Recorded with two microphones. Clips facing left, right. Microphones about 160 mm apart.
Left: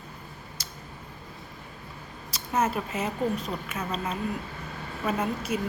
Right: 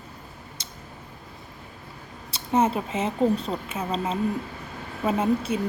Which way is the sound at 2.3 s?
30° right (ahead or behind).